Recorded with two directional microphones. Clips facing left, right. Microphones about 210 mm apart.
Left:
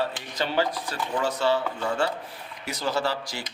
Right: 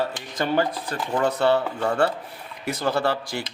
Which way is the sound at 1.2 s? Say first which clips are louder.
Right 4 dB; 60° right (ahead or behind).